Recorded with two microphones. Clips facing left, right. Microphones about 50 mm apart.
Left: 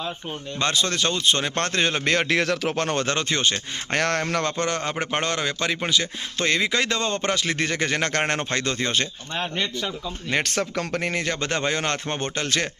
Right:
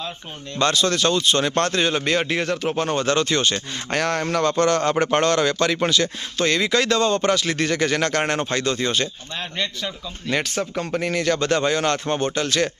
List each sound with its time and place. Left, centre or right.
0.6 s a man's voice: left
1.6 s speech: left
2.1 s speech: left
3.1 s a man's voice: left
3.9 s a man's voice: left
4.5 s a man's voice: centre
6.4 s speech: left
9.6 s a man's voice: centre
10.4 s speech: left
11.0 s speech: left